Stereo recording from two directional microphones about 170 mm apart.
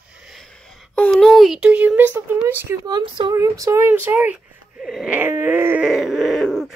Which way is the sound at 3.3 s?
15° right (ahead or behind).